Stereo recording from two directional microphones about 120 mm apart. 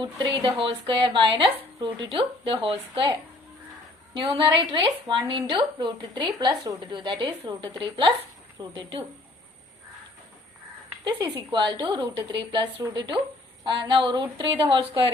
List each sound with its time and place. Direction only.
0.0 s speech: 40° right (ahead or behind)
4.1 s a woman's voice: 45° right (ahead or behind)
11.2 s a woman's voice: 40° right (ahead or behind)